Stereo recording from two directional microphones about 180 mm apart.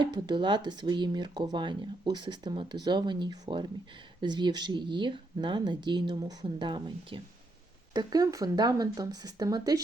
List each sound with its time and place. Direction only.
0.0 s speech: 25° right (ahead or behind)